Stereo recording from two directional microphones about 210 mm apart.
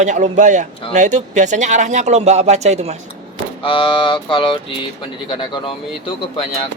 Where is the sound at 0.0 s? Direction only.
35° right (ahead or behind).